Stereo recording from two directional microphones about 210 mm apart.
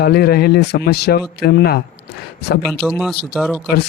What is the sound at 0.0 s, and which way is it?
Speech, 50° left (ahead or behind).